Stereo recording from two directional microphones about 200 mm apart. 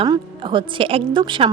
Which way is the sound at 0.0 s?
25° right (ahead or behind).